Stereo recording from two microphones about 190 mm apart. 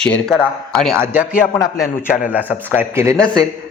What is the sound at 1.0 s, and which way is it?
Speech, 10° right (ahead or behind).